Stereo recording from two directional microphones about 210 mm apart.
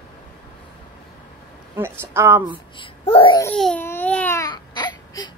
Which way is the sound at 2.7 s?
25° left (ahead or behind).